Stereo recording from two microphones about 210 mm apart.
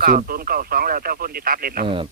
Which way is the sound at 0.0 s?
45° right (ahead or behind).